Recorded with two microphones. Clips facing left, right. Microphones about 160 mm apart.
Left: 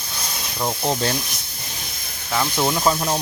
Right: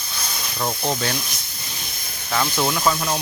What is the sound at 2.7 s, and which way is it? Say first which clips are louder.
Speech: left 1 dB; 25° left (ahead or behind).